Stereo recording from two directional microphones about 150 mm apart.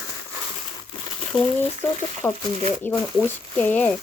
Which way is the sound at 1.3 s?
5° left (ahead or behind).